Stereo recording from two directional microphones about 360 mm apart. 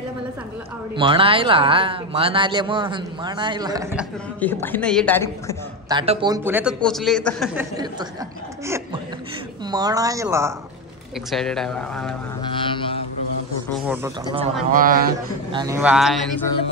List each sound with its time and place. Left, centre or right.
0.9 s speech: centre
4.4 s a man's voice: centre
5.9 s a man's voice: centre
9.7 s a man's voice: centre
12.4 s music: centre
13.8 s speech: centre
14.7 s speech: right
15.5 s a man's voice: centre